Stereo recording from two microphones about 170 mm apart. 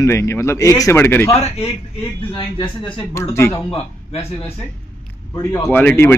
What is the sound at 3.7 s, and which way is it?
Speech, 35° left (ahead or behind).